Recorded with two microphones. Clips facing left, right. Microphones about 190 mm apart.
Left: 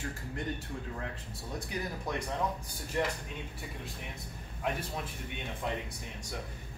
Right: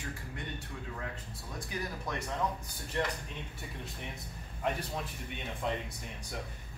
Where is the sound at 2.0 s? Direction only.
15° left (ahead or behind).